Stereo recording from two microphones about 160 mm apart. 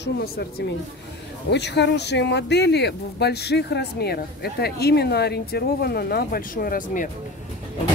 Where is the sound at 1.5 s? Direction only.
90° left; by 7.0 s 60° left (ahead or behind).